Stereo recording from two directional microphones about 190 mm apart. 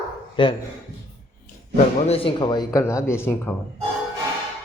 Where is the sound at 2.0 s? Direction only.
30° left (ahead or behind); by 3.5 s 10° left (ahead or behind).